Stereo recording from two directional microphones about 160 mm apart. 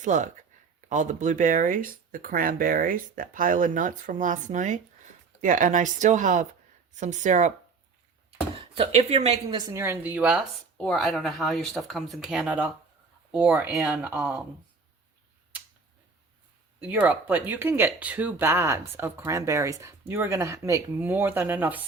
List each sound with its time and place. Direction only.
0.0 s speech: 50° right (ahead or behind)
8.5 s a woman's voice: 35° right (ahead or behind)
9.6 s speech: 20° right (ahead or behind)
10.8 s speech: 5° left (ahead or behind)
16.9 s speech: 10° right (ahead or behind)